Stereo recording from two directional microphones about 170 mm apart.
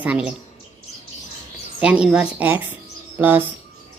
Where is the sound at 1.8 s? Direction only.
5° right (ahead or behind).